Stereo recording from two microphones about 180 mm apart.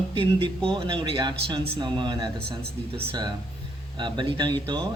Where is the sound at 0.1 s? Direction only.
30° right (ahead or behind).